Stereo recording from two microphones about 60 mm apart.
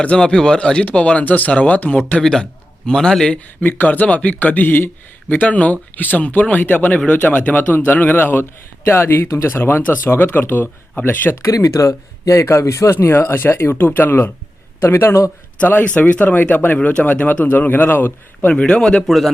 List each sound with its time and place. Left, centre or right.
0.0 s speech: centre
2.2 s a man's voice: centre
3.6 s speech: left
10.1 s speech: left
11.4 s speech: left
15.6 s speech: left
18.5 s speech: centre
19.0 s speech: centre